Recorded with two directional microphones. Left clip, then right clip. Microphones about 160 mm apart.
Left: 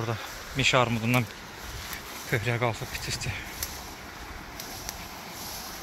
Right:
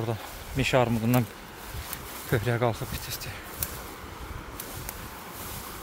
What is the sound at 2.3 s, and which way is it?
Speech, 45° right (ahead or behind).